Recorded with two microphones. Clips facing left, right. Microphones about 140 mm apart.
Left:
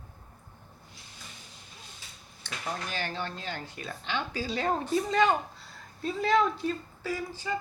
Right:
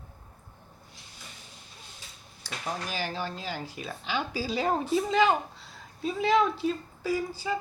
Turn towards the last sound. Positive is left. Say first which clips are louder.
# right 4 dB
turn(degrees=-10)  # may be behind; listen again after turning